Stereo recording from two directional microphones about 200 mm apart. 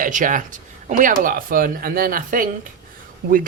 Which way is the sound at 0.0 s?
40° right (ahead or behind).